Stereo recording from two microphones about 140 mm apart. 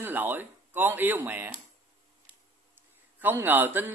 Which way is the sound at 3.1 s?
15° right (ahead or behind).